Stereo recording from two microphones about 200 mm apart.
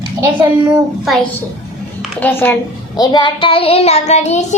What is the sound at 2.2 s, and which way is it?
Speech, 10° left (ahead or behind).